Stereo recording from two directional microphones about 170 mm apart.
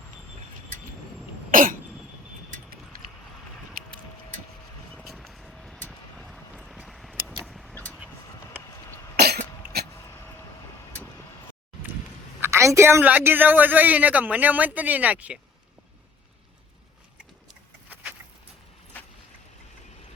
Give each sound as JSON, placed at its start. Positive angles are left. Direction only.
{"t": 1.5, "sound": "cough", "side_deg": -55}
{"t": 4.9, "sound": "vehicle", "side_deg": 0}
{"t": 9.1, "sound": "cough", "side_deg": -70}
{"t": 12.4, "sound": "a woman's voice", "side_deg": -15}
{"t": 17.8, "sound": "a sound", "side_deg": -10}